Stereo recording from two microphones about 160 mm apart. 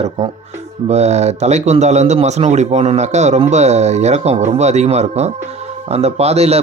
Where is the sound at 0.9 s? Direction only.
45° right (ahead or behind).